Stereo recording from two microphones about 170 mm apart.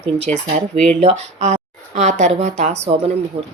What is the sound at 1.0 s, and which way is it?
A woman's voice, 40° right (ahead or behind).